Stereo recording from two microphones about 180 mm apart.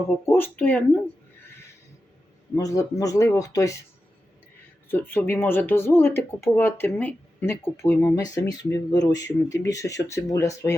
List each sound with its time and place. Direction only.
0.3 s speech: 10° left (ahead or behind)
2.6 s speech: 20° left (ahead or behind)
4.9 s speech: 10° left (ahead or behind)